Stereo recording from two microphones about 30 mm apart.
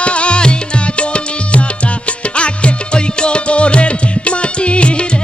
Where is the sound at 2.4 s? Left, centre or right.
Left.